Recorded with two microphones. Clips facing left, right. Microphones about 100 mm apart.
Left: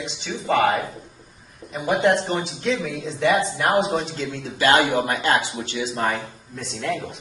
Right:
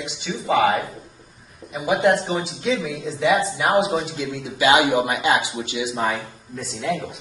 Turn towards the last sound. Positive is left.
turn(degrees=0)  # may be behind; listen again after turning